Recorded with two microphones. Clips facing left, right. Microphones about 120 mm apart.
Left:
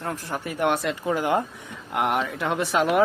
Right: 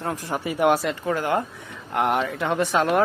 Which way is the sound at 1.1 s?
15° left (ahead or behind).